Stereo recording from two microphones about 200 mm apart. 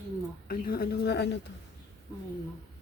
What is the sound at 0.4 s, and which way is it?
Speech, 50° left (ahead or behind).